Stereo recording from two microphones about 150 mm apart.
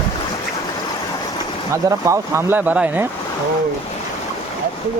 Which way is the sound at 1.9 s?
20° right (ahead or behind).